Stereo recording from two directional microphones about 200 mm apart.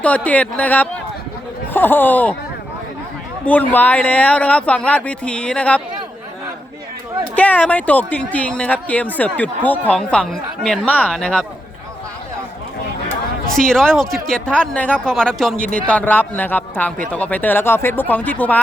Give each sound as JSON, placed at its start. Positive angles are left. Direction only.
{"t": 0.0, "sound": "speech", "side_deg": 5}
{"t": 3.4, "sound": "speech", "side_deg": 10}
{"t": 7.3, "sound": "speech", "side_deg": 10}
{"t": 13.5, "sound": "speech", "side_deg": 0}